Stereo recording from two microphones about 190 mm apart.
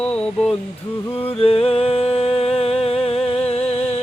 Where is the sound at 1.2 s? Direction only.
30° left (ahead or behind).